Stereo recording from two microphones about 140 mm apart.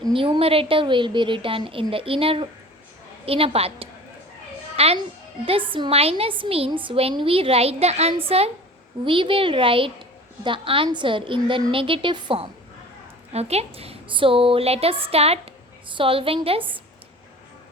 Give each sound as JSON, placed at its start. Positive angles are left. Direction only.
{"t": 0.0, "sound": "a woman's voice", "side_deg": -40}
{"t": 13.3, "sound": "a woman's voice", "side_deg": -50}